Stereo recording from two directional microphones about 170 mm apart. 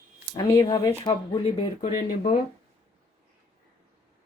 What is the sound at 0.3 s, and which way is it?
Speech, 20° left (ahead or behind).